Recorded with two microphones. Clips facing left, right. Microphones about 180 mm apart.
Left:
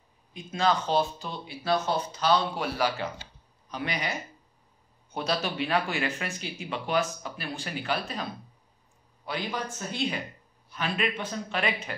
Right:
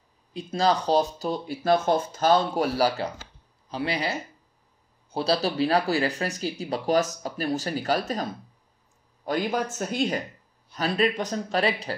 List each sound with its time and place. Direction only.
0.3 s speech: 35° right (ahead or behind)